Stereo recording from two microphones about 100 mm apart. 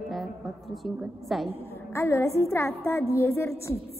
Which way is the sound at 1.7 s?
25° left (ahead or behind).